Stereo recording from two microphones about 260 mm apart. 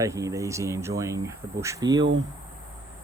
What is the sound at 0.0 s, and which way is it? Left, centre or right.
Speech, centre.